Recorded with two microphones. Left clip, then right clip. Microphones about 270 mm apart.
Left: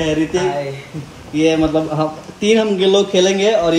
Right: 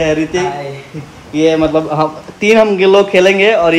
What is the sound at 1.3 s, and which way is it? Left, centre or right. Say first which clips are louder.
Speech: right 4 dB; centre.